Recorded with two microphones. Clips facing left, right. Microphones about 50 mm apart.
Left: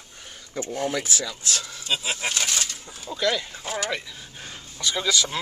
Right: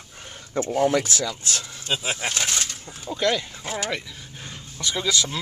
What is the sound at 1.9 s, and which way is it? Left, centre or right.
Speech, centre.